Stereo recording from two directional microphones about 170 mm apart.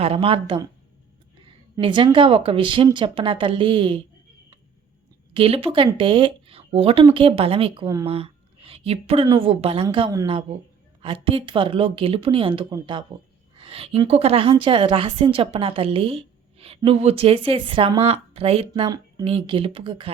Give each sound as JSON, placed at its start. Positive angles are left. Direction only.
{"t": 0.0, "sound": "a woman's voice", "side_deg": -35}
{"t": 5.3, "sound": "a woman's voice", "side_deg": -35}
{"t": 18.7, "sound": "a woman's voice", "side_deg": -25}